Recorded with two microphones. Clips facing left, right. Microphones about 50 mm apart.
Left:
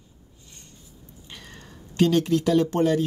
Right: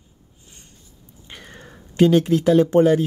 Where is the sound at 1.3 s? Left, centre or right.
Right.